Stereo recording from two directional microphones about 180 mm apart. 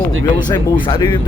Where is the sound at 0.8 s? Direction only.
25° left (ahead or behind).